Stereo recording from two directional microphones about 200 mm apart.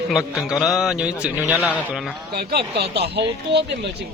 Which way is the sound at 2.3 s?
50° right (ahead or behind).